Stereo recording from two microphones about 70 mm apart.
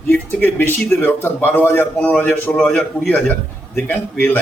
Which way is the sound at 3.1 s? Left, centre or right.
Left.